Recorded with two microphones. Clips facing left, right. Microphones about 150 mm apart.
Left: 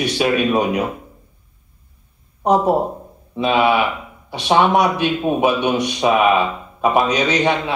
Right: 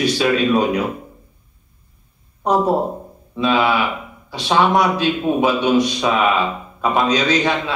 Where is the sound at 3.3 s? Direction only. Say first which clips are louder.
Left 1 dB; 20° left (ahead or behind).